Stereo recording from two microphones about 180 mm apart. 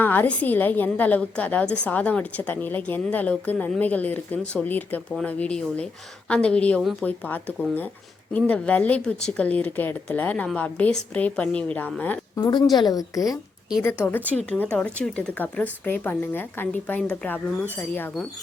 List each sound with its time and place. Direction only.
0.0 s a woman's voice: 10° left (ahead or behind)
12.4 s a woman's voice: 25° left (ahead or behind)